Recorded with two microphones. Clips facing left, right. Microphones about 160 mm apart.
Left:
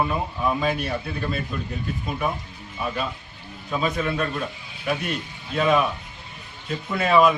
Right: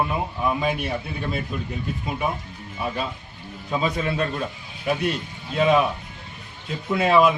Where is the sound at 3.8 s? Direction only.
25° right (ahead or behind).